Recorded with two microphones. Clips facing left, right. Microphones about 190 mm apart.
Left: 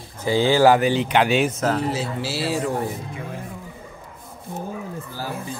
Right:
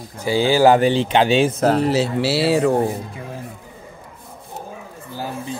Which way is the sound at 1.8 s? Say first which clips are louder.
Right 7 dB; 75° right (ahead or behind).